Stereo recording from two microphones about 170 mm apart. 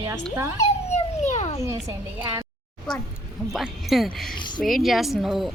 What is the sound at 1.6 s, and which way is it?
Speech, 15° right (ahead or behind).